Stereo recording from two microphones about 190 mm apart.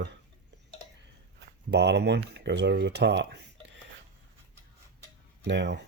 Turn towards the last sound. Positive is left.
turn(degrees=-65)  # may be behind; listen again after turning